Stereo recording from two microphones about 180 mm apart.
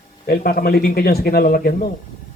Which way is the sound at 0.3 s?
55° left (ahead or behind).